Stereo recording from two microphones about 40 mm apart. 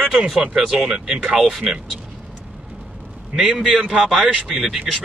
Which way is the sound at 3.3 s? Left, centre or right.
Centre.